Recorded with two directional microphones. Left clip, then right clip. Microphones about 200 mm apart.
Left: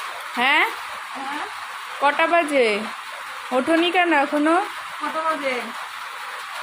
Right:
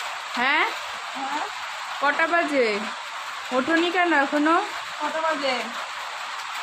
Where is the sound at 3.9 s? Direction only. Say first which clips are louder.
Left 2 dB; 5° left (ahead or behind).